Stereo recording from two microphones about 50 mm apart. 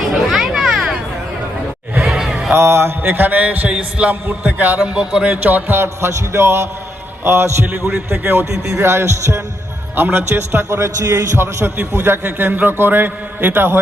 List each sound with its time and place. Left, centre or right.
0.3 s children playing: centre
2.0 s a sound: centre
2.5 s a man's voice: right
3.0 s a man's voice: right
4.8 s a man's voice: centre
5.4 s a man's voice: right
5.7 s a man's voice: right
8.1 s a man's voice: right
8.8 s a man's voice: right
9.9 s a man's voice: right
12.0 s a man's voice: right